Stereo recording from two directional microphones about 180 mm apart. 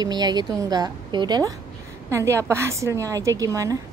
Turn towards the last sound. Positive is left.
turn(degrees=-20)  # may be behind; listen again after turning